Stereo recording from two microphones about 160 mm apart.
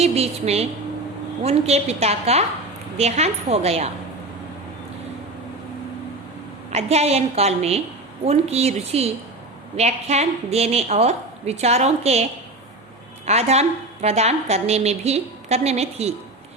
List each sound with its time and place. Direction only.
0.0 s a woman's voice: 40° right (ahead or behind)
6.7 s a woman's voice: 40° right (ahead or behind)
13.2 s a woman's voice: 40° right (ahead or behind)